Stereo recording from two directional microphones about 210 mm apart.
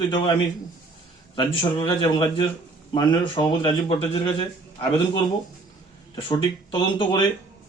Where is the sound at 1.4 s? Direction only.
20° left (ahead or behind).